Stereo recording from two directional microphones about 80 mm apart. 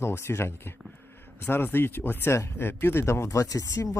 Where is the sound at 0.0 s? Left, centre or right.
Left.